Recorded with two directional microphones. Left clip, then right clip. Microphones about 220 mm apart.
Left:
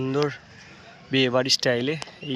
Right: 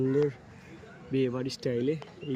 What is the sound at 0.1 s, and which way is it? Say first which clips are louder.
Speech: left 6 dB; 5° right (ahead or behind).